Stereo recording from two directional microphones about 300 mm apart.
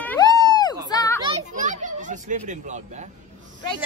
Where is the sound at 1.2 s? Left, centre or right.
Right.